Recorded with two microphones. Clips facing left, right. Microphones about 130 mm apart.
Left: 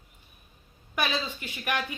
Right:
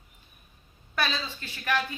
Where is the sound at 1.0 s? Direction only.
15° left (ahead or behind).